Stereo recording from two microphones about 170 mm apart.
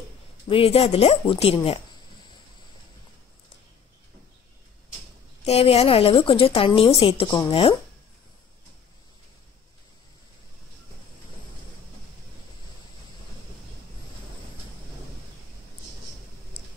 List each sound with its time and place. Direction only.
0.5 s a woman's voice: 35° left (ahead or behind)
5.4 s a woman's voice: 35° left (ahead or behind)